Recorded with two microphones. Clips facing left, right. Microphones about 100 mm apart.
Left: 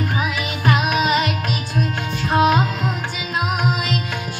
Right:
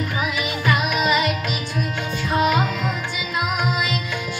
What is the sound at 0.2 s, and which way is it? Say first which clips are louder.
Music: left 1 dB; 50° left (ahead or behind).